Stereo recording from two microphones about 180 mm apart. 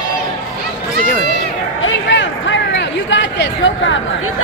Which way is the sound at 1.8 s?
90° left.